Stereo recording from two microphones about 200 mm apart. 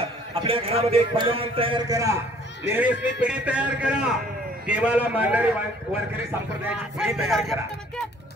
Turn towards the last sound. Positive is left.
turn(degrees=0)  # may be behind; listen again after turning